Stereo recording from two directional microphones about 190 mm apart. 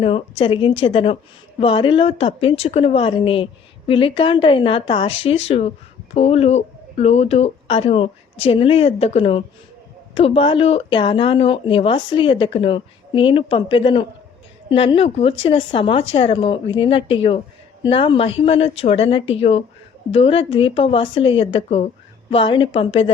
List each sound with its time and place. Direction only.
0.0 s a woman's voice: 30° left (ahead or behind)